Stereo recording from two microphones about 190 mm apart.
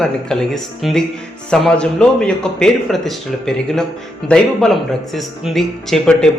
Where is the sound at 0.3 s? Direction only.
Centre (ahead or behind).